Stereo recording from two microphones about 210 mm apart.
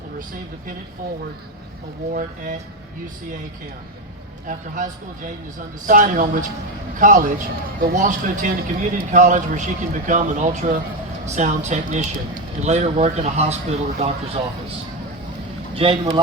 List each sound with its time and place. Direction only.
2.1 s a man's voice: 40° right (ahead or behind)
4.4 s a man's voice: 40° right (ahead or behind)
15.7 s speech: 25° right (ahead or behind)